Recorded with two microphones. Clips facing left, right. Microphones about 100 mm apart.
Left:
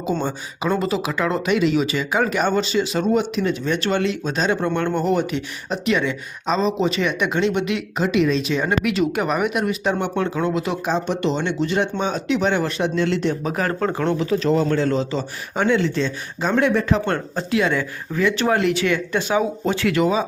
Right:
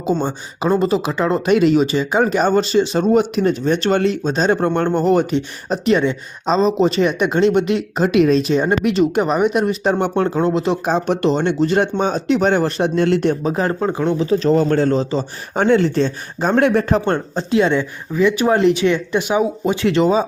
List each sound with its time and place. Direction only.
0.2 s speech: 30° right (ahead or behind)
1.5 s speech: 45° right (ahead or behind)
3.1 s speech: 45° right (ahead or behind)
8.6 s speech: 30° right (ahead or behind)
10.8 s speech: 50° right (ahead or behind)
13.4 s speech: 25° right (ahead or behind)
13.8 s speech: 15° right (ahead or behind)
14.2 s speech: 30° right (ahead or behind); by 17.0 s 50° right (ahead or behind)
17.1 s speech: 30° right (ahead or behind)
18.1 s speech: 15° right (ahead or behind); by 20.2 s 30° right (ahead or behind)